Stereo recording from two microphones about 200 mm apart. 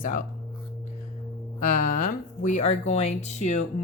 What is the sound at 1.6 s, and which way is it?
Speech, 40° left (ahead or behind).